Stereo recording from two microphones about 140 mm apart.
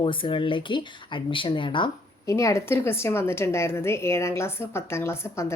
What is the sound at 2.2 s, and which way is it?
A woman's voice, 20° left (ahead or behind).